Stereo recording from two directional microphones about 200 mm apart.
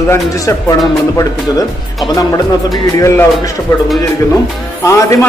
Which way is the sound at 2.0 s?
20° left (ahead or behind).